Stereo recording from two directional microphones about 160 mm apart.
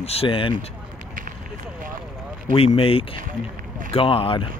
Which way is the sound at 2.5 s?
35° left (ahead or behind).